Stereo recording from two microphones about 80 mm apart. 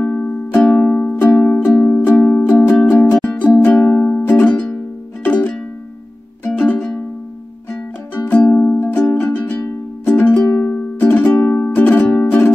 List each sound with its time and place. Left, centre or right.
0.0 s music: centre
8.1 s music: centre
9.1 s music: centre
10.6 s music: left